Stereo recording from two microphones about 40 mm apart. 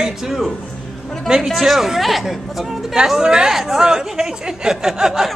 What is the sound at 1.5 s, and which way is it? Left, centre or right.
Speech, centre.